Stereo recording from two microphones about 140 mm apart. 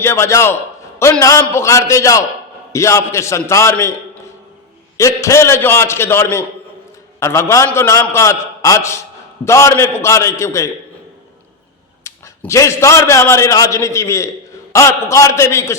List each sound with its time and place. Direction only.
0.0 s a man's voice: 20° left (ahead or behind)
4.9 s a man's voice: 20° left (ahead or behind)
12.0 s a man's voice: 20° left (ahead or behind)